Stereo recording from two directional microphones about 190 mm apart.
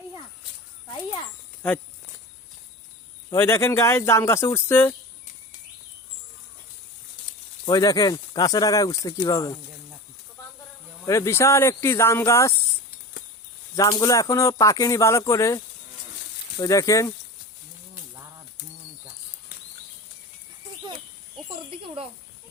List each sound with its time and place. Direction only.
3.2 s speech: 15° left (ahead or behind)
7.7 s speech: 20° left (ahead or behind)
11.0 s speech: 15° left (ahead or behind)
13.7 s speech: 15° left (ahead or behind)
21.5 s a sound: 30° right (ahead or behind)